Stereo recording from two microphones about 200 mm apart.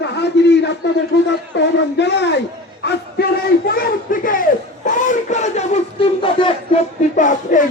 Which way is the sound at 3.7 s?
45° left (ahead or behind).